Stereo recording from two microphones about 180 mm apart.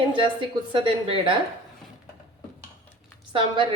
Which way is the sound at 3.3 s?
25° right (ahead or behind).